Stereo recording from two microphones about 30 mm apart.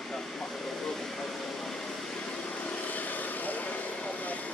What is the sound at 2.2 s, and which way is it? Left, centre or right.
Vehicle, left.